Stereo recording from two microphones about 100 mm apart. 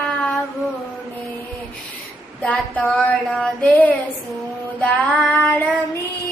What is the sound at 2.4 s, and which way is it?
Child singing, 15° left (ahead or behind).